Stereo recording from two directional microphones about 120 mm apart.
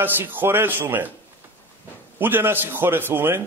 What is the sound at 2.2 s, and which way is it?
A man's voice, 15° right (ahead or behind).